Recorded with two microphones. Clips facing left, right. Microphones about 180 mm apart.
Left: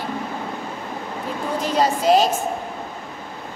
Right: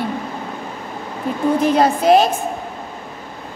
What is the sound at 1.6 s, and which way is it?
Speech, 55° right (ahead or behind).